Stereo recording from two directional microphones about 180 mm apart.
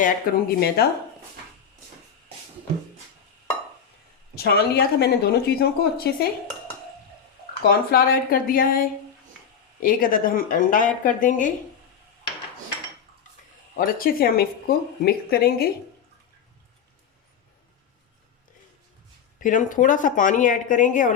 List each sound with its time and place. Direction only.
0.0 s speech: 60° left (ahead or behind)
4.4 s speech: 60° left (ahead or behind)
7.9 s speech: 55° left (ahead or behind)
13.7 s speech: 55° left (ahead or behind)
19.4 s speech: 45° left (ahead or behind)